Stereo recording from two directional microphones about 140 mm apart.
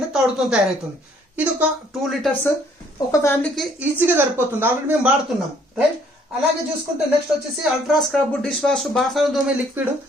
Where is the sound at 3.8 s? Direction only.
15° right (ahead or behind).